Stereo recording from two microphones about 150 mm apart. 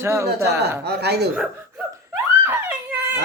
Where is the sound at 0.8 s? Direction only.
90° right.